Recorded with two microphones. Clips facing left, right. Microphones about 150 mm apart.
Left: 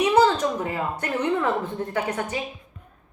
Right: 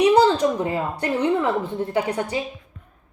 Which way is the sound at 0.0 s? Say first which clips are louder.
Right 3 dB; 35° right (ahead or behind).